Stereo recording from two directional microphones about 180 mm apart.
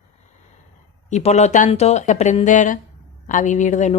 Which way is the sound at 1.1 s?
40° left (ahead or behind).